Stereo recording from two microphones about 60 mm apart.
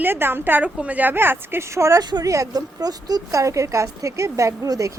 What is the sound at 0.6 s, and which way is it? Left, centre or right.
Speech, right.